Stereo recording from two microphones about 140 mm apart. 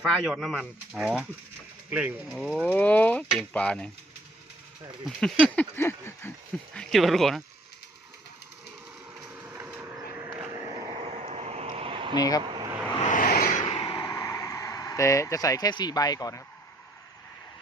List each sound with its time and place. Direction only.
0.0 s speech: centre (ahead or behind)
2.3 s mechanisms: 5° left (ahead or behind)
5.0 s mechanisms: 5° left (ahead or behind)
6.7 s speech: centre (ahead or behind)
9.3 s printer: 15° right (ahead or behind)
10.5 s vehicle: 30° right (ahead or behind)
12.1 s speech: 25° left (ahead or behind)
13.1 s a sound: 75° left (ahead or behind); by 13.8 s 55° left (ahead or behind)
13.8 s a sound: 30° left (ahead or behind)